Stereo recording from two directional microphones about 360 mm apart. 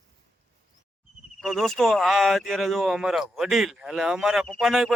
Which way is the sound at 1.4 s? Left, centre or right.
Centre.